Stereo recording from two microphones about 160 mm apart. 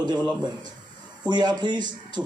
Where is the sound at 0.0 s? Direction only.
25° right (ahead or behind).